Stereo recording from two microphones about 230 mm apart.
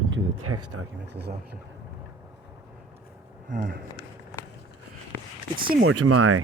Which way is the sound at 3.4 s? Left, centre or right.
Right.